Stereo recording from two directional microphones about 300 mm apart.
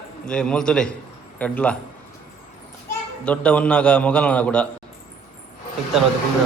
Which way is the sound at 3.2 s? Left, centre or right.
Centre.